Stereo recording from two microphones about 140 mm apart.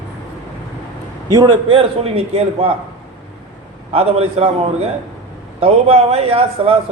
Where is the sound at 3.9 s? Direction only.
45° right (ahead or behind).